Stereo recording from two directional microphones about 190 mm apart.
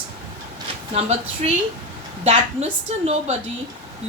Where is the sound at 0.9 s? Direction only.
35° right (ahead or behind).